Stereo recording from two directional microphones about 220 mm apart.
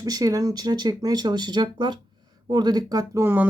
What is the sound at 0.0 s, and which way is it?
Speech, 15° right (ahead or behind).